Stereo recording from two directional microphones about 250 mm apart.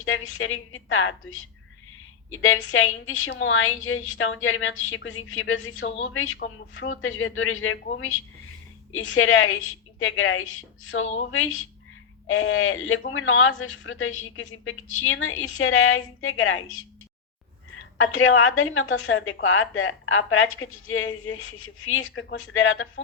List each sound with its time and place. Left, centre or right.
0.0 s a woman's voice: left
9.1 s a woman's voice: left
18.2 s a woman's voice: left
21.8 s a woman's voice: left